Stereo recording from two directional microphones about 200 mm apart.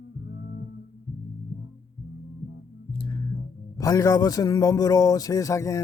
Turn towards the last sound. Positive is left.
turn(degrees=15)  # may be behind; listen again after turning